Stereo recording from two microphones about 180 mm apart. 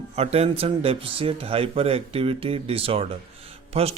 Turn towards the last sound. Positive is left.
turn(degrees=-35)  # may be behind; listen again after turning